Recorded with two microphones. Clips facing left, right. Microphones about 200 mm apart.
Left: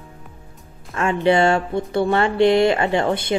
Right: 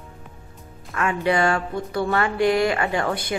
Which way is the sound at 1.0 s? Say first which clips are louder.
Left 4 dB; 25° left (ahead or behind).